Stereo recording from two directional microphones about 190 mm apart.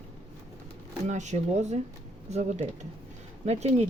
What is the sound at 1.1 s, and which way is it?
Speech, 40° right (ahead or behind).